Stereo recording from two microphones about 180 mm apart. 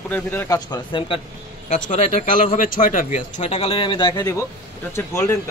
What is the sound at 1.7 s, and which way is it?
Speech, 45° left (ahead or behind).